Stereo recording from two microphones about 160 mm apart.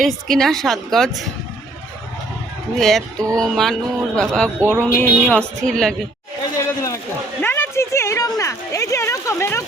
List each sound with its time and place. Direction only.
0.0 s a woman's voice: centre (ahead or behind)
2.7 s a woman's voice: centre (ahead or behind)
6.6 s a sound: 20° left (ahead or behind)